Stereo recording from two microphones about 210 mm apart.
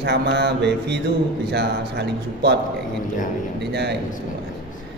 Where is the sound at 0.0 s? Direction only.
55° right (ahead or behind).